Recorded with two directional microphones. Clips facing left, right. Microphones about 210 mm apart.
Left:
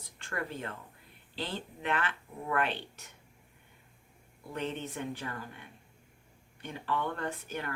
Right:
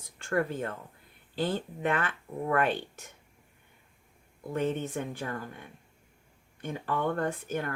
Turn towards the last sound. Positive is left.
turn(degrees=-45)  # may be behind; listen again after turning